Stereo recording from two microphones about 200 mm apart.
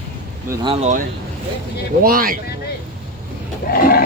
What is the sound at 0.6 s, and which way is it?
Speech, 30° right (ahead or behind).